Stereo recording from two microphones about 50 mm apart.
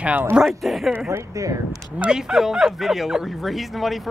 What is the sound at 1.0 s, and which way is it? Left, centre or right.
Speech, right.